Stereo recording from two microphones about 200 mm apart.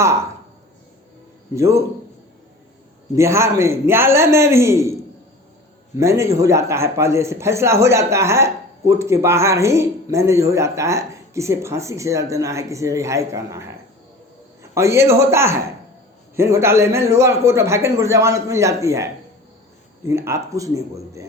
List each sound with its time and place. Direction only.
1.5 s a man's voice: 15° right (ahead or behind)
3.2 s a man's voice: 15° right (ahead or behind)
6.0 s a man's voice: 15° right (ahead or behind)